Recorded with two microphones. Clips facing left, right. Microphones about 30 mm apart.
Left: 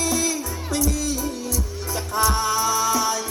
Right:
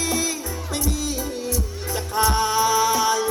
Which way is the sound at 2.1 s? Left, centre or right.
Right.